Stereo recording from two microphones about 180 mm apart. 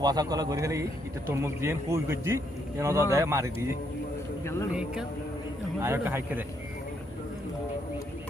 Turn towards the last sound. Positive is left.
turn(degrees=-10)  # may be behind; listen again after turning